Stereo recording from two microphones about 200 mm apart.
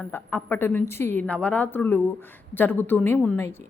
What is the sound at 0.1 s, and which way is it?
Speech, 10° left (ahead or behind).